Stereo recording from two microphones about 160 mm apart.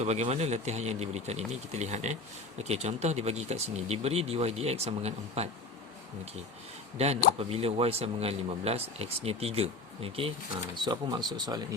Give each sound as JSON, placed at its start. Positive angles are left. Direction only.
{"t": 0.0, "sound": "a man's voice", "side_deg": -40}
{"t": 6.9, "sound": "a man's voice", "side_deg": -40}